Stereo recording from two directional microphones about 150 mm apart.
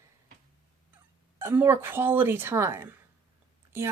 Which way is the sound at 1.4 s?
15° right (ahead or behind).